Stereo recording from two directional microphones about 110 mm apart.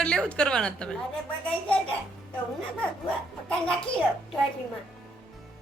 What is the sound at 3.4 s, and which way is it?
Speech, 10° left (ahead or behind).